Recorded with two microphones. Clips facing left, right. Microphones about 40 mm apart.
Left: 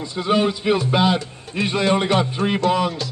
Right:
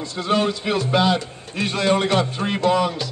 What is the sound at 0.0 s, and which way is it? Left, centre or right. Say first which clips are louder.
Speech: left 1 dB; centre.